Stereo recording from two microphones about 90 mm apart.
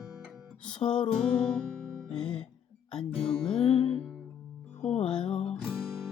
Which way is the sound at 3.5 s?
90° left.